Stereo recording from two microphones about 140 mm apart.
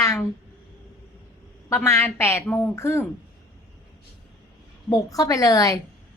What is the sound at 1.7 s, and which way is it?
A woman's voice, 15° left (ahead or behind).